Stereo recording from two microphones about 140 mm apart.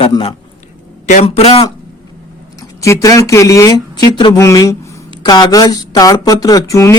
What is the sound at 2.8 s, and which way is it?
Speech, 20° left (ahead or behind).